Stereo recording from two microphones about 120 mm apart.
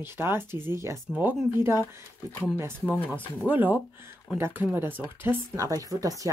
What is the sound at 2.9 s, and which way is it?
Speech, 15° right (ahead or behind).